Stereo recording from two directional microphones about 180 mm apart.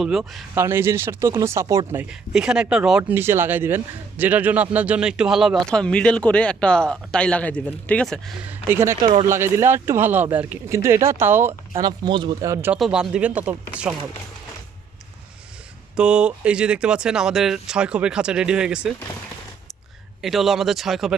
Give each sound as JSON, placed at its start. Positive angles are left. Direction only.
{"t": 0.0, "sound": "a man's voice", "side_deg": 0}
{"t": 0.5, "sound": "speech", "side_deg": -15}
{"t": 1.6, "sound": "speech", "side_deg": -25}
{"t": 1.9, "sound": "a man's voice", "side_deg": -10}
{"t": 8.4, "sound": "speech", "side_deg": -15}
{"t": 9.0, "sound": "speech", "side_deg": -25}
{"t": 9.3, "sound": "speech", "side_deg": -15}
{"t": 11.8, "sound": "speech", "side_deg": -25}
{"t": 12.7, "sound": "a man's voice", "side_deg": -5}
{"t": 16.0, "sound": "a man's voice", "side_deg": -5}
{"t": 20.2, "sound": "a man's voice", "side_deg": 0}